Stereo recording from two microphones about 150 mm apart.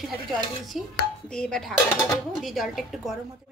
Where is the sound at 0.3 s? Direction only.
Centre (ahead or behind).